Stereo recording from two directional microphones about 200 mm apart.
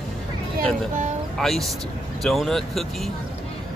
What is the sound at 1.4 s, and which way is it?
Speech, centre (ahead or behind).